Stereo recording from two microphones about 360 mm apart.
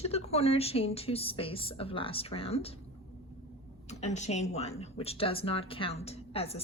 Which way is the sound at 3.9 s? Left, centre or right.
Centre.